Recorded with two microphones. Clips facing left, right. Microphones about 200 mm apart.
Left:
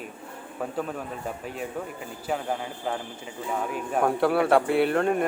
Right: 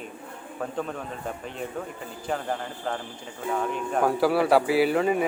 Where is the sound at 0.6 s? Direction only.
5° left (ahead or behind).